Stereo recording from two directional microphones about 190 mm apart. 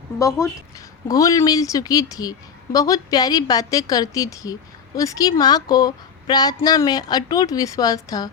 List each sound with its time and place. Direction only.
0.2 s a woman's voice: 15° left (ahead or behind)